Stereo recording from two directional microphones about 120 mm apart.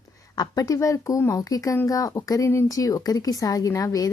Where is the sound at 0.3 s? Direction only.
30° left (ahead or behind).